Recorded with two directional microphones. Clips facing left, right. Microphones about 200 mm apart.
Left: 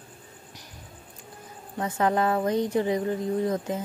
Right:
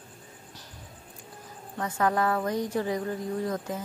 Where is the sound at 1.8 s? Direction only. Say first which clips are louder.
Left 2 dB; 20° left (ahead or behind).